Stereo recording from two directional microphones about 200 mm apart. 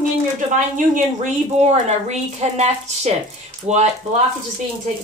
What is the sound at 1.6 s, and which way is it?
A woman's voice, 35° right (ahead or behind).